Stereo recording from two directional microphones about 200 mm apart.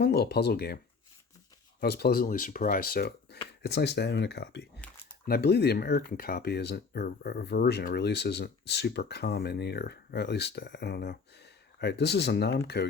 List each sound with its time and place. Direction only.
0.0 s speech: 50° left (ahead or behind)
1.8 s speech: 50° left (ahead or behind)